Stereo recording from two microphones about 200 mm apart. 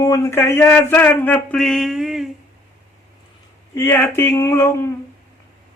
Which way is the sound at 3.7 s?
10° left (ahead or behind).